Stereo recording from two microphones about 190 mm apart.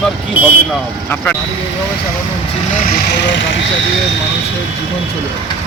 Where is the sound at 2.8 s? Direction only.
60° left (ahead or behind).